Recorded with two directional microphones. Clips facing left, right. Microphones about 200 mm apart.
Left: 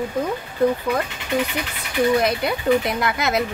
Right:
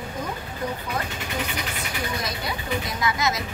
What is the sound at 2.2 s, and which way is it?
A woman's voice, 60° left (ahead or behind).